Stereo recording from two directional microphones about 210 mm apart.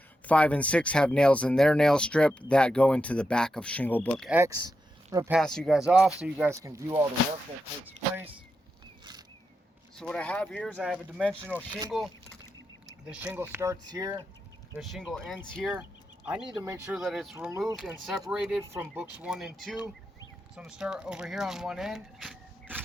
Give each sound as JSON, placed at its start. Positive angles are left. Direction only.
{"t": 0.3, "sound": "speech", "side_deg": 5}
{"t": 4.3, "sound": "speech", "side_deg": -15}
{"t": 5.3, "sound": "speech", "side_deg": 5}
{"t": 6.5, "sound": "speech", "side_deg": -15}
{"t": 10.0, "sound": "speech", "side_deg": 5}
{"t": 10.8, "sound": "speech", "side_deg": -5}
{"t": 14.8, "sound": "speech", "side_deg": 0}